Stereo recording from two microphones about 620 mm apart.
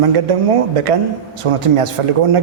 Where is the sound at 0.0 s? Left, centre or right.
Right.